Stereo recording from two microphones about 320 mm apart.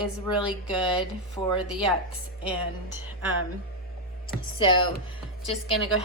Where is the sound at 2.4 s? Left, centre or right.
Centre.